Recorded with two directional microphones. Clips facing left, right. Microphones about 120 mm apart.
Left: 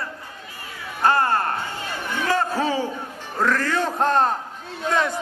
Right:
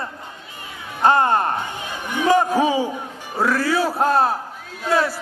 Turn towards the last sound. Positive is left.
turn(degrees=-5)  # may be behind; listen again after turning